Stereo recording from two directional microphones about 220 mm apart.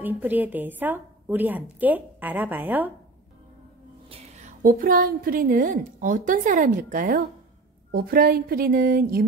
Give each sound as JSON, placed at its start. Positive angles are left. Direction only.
{"t": 0.0, "sound": "a woman's voice", "side_deg": -10}
{"t": 4.1, "sound": "a woman's voice", "side_deg": -35}